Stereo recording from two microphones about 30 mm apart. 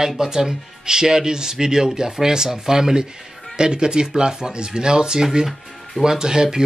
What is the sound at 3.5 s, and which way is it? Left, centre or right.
Speech, right.